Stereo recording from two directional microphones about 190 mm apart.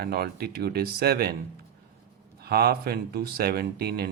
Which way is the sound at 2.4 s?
55° right (ahead or behind).